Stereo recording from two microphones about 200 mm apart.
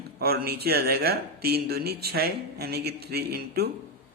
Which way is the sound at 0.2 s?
50° right (ahead or behind).